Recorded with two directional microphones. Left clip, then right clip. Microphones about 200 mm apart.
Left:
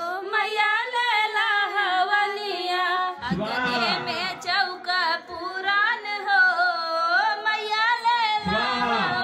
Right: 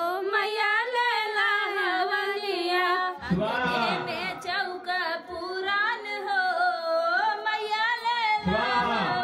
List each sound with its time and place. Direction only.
0.7 s singing: 10° right (ahead or behind)
2.7 s music: 5° right (ahead or behind)
4.5 s singing: 15° right (ahead or behind)
5.7 s carnatic music: 15° right (ahead or behind)